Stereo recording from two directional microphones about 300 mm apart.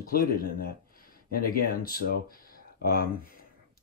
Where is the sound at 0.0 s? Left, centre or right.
Left.